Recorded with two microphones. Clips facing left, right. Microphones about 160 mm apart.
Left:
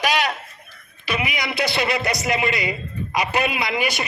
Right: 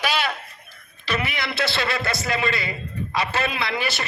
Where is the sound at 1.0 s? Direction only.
15° left (ahead or behind).